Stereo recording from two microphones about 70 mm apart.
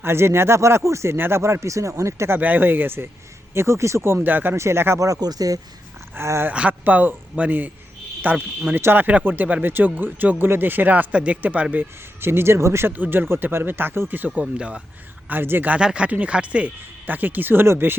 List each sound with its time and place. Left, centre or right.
0.0 s speech: right
2.4 s speech: right
4.5 s speech: right
4.9 s speech: right
5.2 s speech: right
6.1 s speech: right
6.5 s speech: centre; by 12.9 s right
12.9 s speech: right
15.3 s speech: right
15.8 s speech: centre; by 17.9 s right